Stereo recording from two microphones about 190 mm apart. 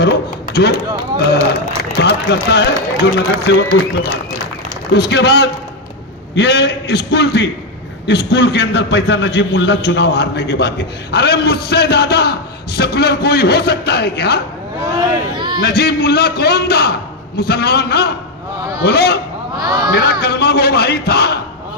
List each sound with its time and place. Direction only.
0.0 s a man's voice: 60° left (ahead or behind)
2.0 s a man's voice: 60° left (ahead or behind)
4.9 s a man's voice: 65° left (ahead or behind)
14.8 s speech: 20° right (ahead or behind)
15.6 s a man's voice: 60° left (ahead or behind)
19.5 s speech: 20° right (ahead or behind)
19.9 s a man's voice: 60° left (ahead or behind)